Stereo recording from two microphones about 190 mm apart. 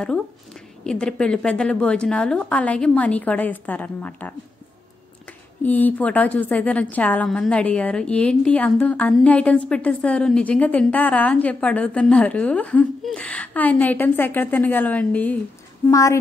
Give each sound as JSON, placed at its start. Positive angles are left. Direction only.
{"t": 0.8, "sound": "a woman's voice", "side_deg": 5}
{"t": 5.6, "sound": "a woman's voice", "side_deg": 10}